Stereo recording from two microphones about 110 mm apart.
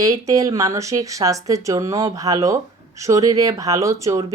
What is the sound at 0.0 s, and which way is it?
Speech, 30° right (ahead or behind).